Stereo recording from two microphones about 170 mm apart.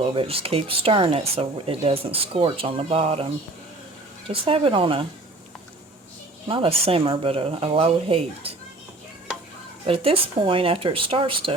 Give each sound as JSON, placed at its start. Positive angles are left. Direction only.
{"t": 0.0, "sound": "speech", "side_deg": -35}
{"t": 4.3, "sound": "speech", "side_deg": -35}
{"t": 6.5, "sound": "speech", "side_deg": -30}
{"t": 9.8, "sound": "speech", "side_deg": -35}